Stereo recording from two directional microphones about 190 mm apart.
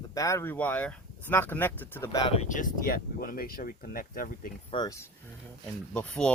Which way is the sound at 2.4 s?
45° left (ahead or behind).